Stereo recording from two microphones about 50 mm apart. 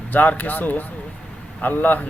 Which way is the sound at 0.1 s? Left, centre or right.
Left.